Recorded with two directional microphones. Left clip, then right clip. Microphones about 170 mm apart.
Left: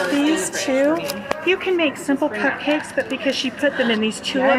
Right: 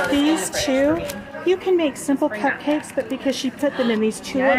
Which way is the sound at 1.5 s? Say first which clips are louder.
Right 1 dB; 20° right (ahead or behind).